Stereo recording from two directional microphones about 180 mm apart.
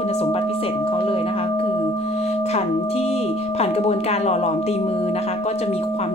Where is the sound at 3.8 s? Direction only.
35° left (ahead or behind).